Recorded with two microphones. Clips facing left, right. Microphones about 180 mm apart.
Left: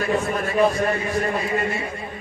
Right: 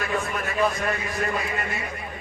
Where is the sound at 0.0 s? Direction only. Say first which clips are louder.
Left 5 dB; 30° left (ahead or behind).